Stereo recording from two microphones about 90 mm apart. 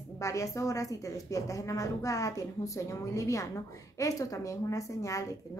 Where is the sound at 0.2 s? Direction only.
35° left (ahead or behind).